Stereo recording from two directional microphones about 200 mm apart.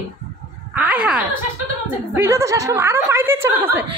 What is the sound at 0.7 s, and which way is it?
A woman's voice, 5° right (ahead or behind).